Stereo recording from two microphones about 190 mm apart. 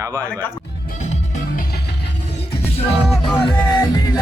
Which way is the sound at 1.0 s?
40° left (ahead or behind).